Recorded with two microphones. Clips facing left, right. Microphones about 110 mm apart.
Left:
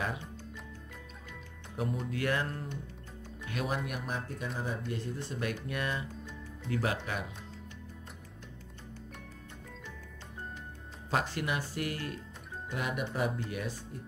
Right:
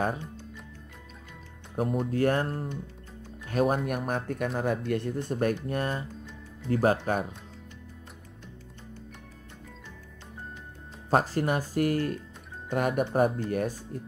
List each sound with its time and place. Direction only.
1.8 s speech: 45° right (ahead or behind)
11.1 s speech: 40° right (ahead or behind)